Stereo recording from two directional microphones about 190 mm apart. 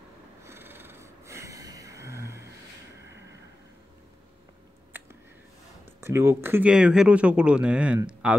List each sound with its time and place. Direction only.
0.5 s snort: 10° right (ahead or behind)
5.9 s speech: 15° right (ahead or behind)